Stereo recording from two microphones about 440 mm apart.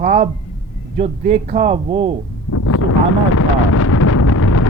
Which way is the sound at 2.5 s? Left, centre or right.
Left.